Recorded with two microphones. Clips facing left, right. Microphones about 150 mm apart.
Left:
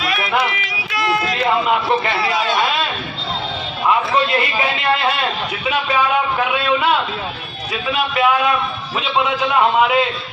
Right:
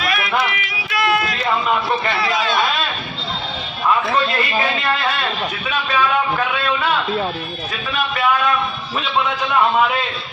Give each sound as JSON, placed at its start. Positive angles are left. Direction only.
{"t": 0.0, "sound": "music", "side_deg": 25}
{"t": 0.4, "sound": "a sound", "side_deg": 25}
{"t": 3.8, "sound": "a man's voice", "side_deg": 15}
{"t": 9.0, "sound": "a man's voice", "side_deg": 15}